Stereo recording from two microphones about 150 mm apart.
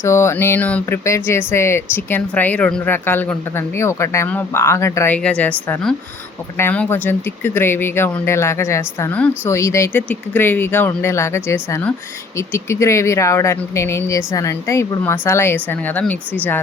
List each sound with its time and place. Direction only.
0.0 s speech: 20° left (ahead or behind)